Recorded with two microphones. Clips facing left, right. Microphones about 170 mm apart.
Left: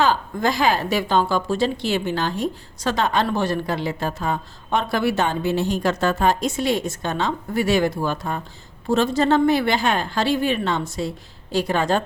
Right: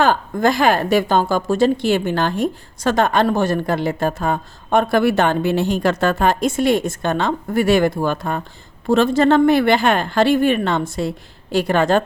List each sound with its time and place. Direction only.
0.0 s a woman's voice: 55° right (ahead or behind)